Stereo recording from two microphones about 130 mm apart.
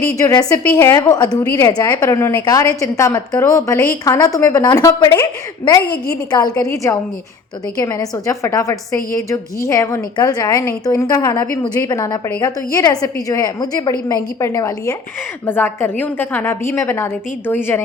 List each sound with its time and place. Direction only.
0.2 s a woman's voice: 25° left (ahead or behind)